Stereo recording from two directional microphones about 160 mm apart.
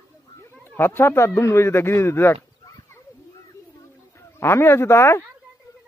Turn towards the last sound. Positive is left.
turn(degrees=15)  # may be behind; listen again after turning